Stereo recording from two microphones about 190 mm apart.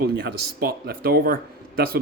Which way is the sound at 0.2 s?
55° right (ahead or behind).